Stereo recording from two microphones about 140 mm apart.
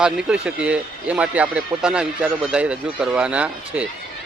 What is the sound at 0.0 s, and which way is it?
A man's voice, 5° right (ahead or behind).